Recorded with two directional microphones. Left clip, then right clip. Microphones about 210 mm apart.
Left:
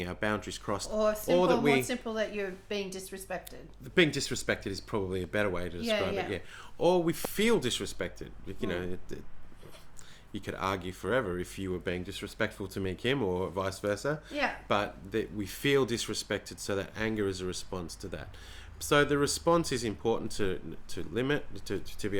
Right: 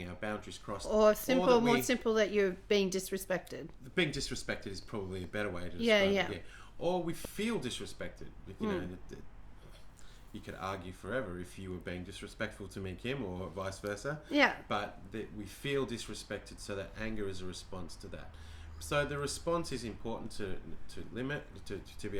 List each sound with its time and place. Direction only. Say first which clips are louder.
0.0 s speech: left 8 dB; 15° left (ahead or behind)
0.9 s a woman's voice: right 2 dB; 45° right (ahead or behind)
3.9 s speech: left 7 dB; 10° left (ahead or behind)
5.8 s a woman's voice: right 3 dB; 50° right (ahead or behind)
6.3 s speech: left 7 dB; 10° left (ahead or behind)
10.3 s speech: left 7 dB; 15° left (ahead or behind)